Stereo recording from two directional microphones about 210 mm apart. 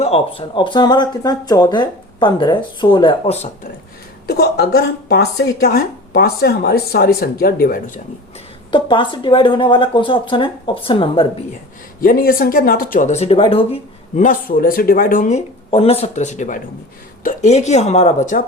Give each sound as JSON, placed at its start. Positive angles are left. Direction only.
{"t": 0.0, "sound": "speech", "side_deg": 25}
{"t": 4.3, "sound": "speech", "side_deg": 50}
{"t": 8.7, "sound": "speech", "side_deg": 25}
{"t": 11.9, "sound": "speech", "side_deg": 45}
{"t": 14.2, "sound": "speech", "side_deg": 40}
{"t": 15.7, "sound": "speech", "side_deg": 30}